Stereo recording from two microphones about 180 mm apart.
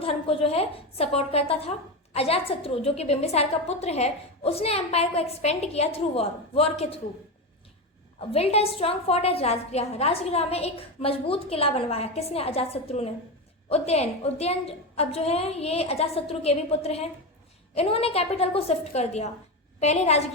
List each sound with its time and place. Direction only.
0.0 s a woman's voice: 30° left (ahead or behind)
8.3 s a woman's voice: 35° left (ahead or behind)